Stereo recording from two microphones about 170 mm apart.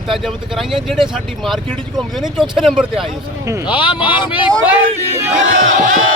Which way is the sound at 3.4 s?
15° right (ahead or behind).